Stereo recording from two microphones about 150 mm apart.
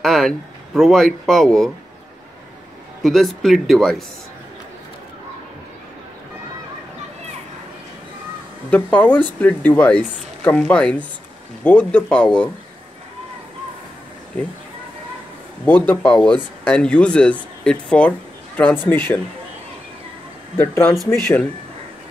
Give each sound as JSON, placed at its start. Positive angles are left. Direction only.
{"t": 0.0, "sound": "speech", "side_deg": 0}
{"t": 3.0, "sound": "speech", "side_deg": 0}
{"t": 8.6, "sound": "speech", "side_deg": 10}
{"t": 15.6, "sound": "speech", "side_deg": 10}
{"t": 20.5, "sound": "speech", "side_deg": 15}